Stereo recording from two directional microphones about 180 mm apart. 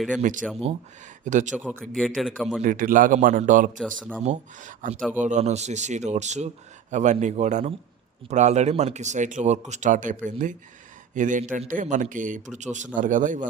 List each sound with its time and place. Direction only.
0.2 s a man's voice: 45° right (ahead or behind)
1.8 s a man's voice: centre (ahead or behind)
2.6 s a man's voice: 50° right (ahead or behind)
3.8 s a man's voice: 5° left (ahead or behind)
4.2 s speech: 40° right (ahead or behind)
4.9 s a man's voice: 5° right (ahead or behind)
5.2 s a man's voice: 40° right (ahead or behind)